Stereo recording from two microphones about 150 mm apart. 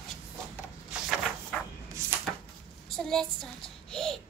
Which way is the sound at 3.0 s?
5° left (ahead or behind).